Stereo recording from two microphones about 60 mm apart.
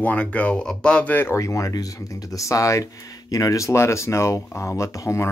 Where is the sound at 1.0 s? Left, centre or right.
Left.